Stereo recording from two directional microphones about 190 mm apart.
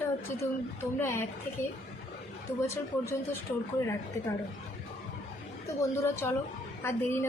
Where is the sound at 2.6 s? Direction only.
15° left (ahead or behind).